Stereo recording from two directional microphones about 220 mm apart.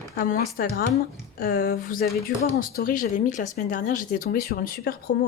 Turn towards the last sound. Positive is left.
turn(degrees=40)  # may be behind; listen again after turning